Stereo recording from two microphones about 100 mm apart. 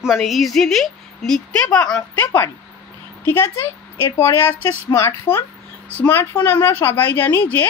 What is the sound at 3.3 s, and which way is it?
A woman's voice, 25° left (ahead or behind).